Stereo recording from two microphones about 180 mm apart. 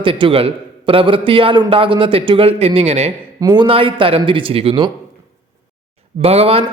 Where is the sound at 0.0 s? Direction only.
30° right (ahead or behind).